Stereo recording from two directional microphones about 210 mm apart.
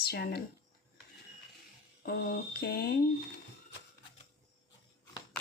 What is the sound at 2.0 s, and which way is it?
Speech, 45° left (ahead or behind).